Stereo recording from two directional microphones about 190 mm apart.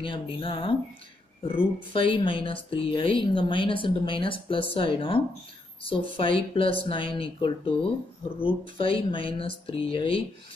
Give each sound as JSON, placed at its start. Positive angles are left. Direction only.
{"t": 0.0, "sound": "speech", "side_deg": 25}